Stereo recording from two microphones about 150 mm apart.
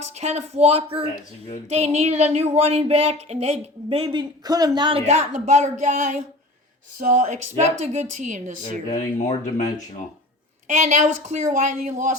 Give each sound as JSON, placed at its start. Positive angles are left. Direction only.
{"t": 0.0, "sound": "speech", "side_deg": -45}
{"t": 7.0, "sound": "a woman's voice", "side_deg": -55}
{"t": 8.9, "sound": "speech", "side_deg": 50}
{"t": 10.8, "sound": "speech", "side_deg": -50}